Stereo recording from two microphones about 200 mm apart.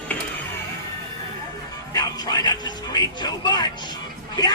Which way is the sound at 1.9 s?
20° left (ahead or behind).